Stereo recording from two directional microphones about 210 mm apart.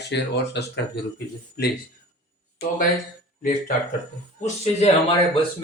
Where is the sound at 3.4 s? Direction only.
40° left (ahead or behind).